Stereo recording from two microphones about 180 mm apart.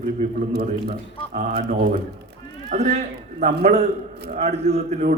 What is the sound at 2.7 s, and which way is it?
A man's voice, 35° right (ahead or behind).